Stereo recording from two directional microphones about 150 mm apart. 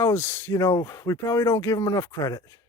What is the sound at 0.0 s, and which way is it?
Speech, 15° left (ahead or behind).